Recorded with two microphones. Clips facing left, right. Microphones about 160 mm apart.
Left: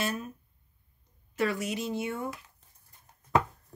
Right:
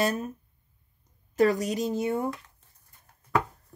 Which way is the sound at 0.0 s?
40° right (ahead or behind).